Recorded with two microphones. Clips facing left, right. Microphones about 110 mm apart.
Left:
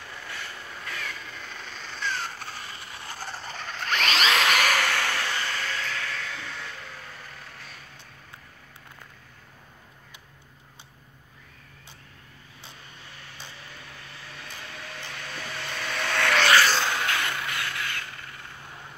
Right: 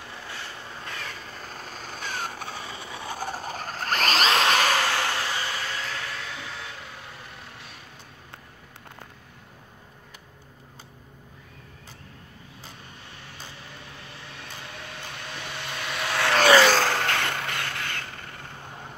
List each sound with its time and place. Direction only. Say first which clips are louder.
0.1 s vehicle: even; 20° right (ahead or behind); by 2.5 s 55° right (ahead or behind)
3.2 s a sound: right 4 dB; 45° right (ahead or behind); by 7.7 s centre (ahead or behind)
15.3 s vehicle: even; centre (ahead or behind)
16.7 s vehicle: right 3 dB; 45° right (ahead or behind)